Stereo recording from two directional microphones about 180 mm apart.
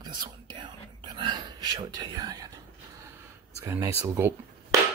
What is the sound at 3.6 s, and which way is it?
Speech, 15° right (ahead or behind).